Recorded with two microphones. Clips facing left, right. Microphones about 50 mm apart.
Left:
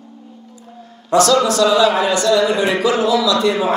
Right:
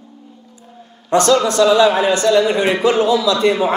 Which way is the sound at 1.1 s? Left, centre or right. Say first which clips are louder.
Even; right.